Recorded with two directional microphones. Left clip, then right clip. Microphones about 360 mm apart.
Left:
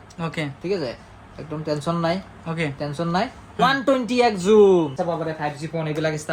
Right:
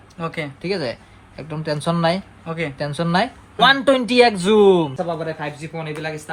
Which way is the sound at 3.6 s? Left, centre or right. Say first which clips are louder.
Right 5 dB; right.